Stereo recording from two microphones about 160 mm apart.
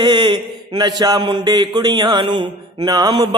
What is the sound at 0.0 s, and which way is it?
Mantra, 30° right (ahead or behind).